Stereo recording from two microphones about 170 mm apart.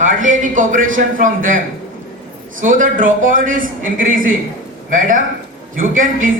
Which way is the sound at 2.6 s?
50° right (ahead or behind).